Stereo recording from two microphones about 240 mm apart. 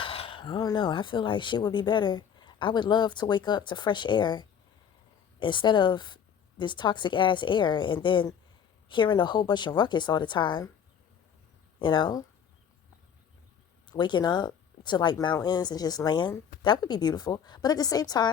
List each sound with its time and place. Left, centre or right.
0.0 s speech: left
11.8 s speech: centre
13.9 s speech: centre